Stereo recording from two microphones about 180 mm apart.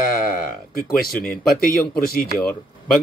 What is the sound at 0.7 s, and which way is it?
Speech, 55° left (ahead or behind).